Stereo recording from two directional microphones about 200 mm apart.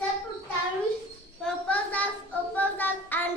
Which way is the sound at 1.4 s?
5° left (ahead or behind).